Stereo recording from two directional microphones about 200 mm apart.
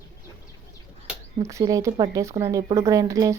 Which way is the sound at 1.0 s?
15° right (ahead or behind).